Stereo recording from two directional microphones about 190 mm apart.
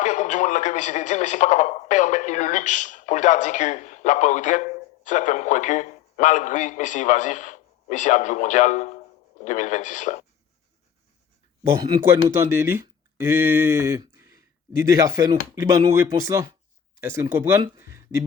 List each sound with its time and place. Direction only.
0.0 s a man's voice: 40° left (ahead or behind)
11.8 s speech: 20° right (ahead or behind)